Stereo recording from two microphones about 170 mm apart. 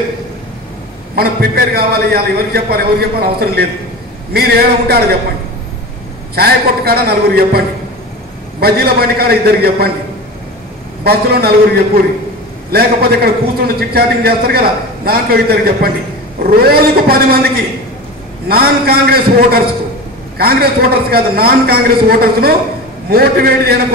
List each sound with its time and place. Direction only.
1.1 s a man's voice: 65° right (ahead or behind)
6.3 s a man's voice: 65° right (ahead or behind)
11.1 s a man's voice: 65° right (ahead or behind)